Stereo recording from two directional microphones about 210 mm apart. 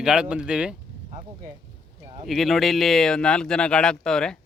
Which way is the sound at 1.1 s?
30° right (ahead or behind).